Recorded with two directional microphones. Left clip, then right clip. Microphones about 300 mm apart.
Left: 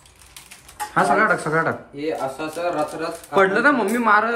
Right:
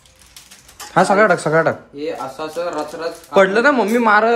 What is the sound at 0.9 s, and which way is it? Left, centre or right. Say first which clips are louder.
A man's voice: right 5 dB; centre.